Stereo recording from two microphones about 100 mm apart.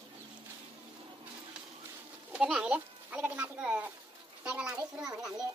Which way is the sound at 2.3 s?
10° right (ahead or behind).